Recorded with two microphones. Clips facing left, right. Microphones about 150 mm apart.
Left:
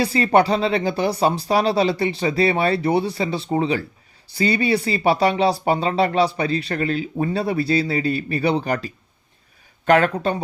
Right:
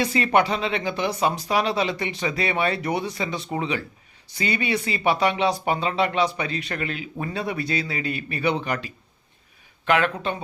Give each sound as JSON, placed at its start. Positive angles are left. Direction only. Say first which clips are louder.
{"t": 0.0, "sound": "speech", "louder": "left 4 dB", "side_deg": 35}